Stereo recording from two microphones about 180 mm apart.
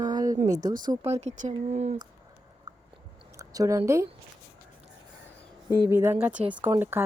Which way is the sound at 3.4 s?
15° right (ahead or behind).